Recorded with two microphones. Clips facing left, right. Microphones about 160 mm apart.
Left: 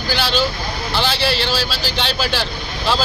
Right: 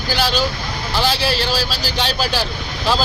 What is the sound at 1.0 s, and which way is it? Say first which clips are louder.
A man's voice: right 1 dB; 40° right (ahead or behind).